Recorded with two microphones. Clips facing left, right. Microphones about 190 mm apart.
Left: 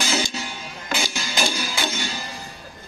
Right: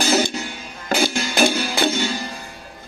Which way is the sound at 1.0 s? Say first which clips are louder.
Right 9 dB; 55° right (ahead or behind).